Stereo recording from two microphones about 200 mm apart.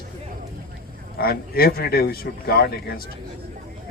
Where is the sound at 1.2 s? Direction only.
50° left (ahead or behind).